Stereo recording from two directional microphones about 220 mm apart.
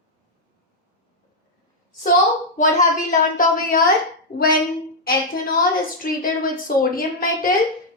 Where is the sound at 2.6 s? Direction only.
35° left (ahead or behind).